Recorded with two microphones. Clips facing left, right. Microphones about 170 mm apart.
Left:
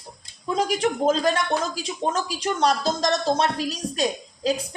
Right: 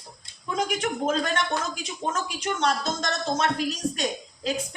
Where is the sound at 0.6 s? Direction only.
30° left (ahead or behind).